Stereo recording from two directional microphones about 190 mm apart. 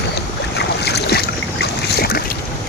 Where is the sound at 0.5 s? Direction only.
60° left (ahead or behind).